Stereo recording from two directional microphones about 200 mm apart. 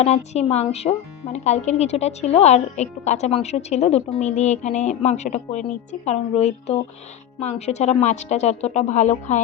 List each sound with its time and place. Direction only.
0.0 s speech: 35° left (ahead or behind)